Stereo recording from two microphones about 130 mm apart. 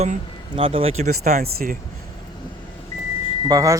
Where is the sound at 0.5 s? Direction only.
45° right (ahead or behind); by 1.7 s 65° right (ahead or behind).